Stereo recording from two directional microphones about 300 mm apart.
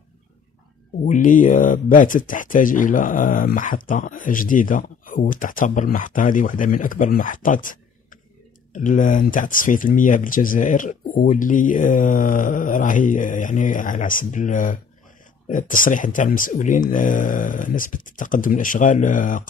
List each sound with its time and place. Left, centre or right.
1.0 s speech: left